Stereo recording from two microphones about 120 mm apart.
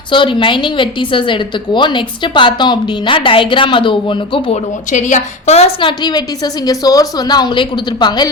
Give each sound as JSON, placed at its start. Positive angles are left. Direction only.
{"t": 0.1, "sound": "a woman's voice", "side_deg": 45}
{"t": 4.5, "sound": "a woman's voice", "side_deg": 90}
{"t": 5.8, "sound": "a woman's voice", "side_deg": 35}